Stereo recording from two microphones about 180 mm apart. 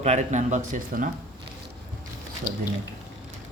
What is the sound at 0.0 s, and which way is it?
Speech, 40° right (ahead or behind).